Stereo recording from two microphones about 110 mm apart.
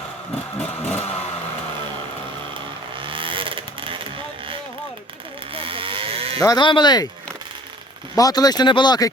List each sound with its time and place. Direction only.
0.6 s vehicle: 15° left (ahead or behind)
3.0 s vehicle: 50° right (ahead or behind)
5.5 s a sound: 55° right (ahead or behind)
6.4 s speech: 40° left (ahead or behind)
8.1 s speech: 35° left (ahead or behind)